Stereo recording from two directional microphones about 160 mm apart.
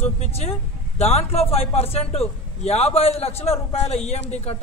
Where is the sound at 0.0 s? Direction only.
40° left (ahead or behind).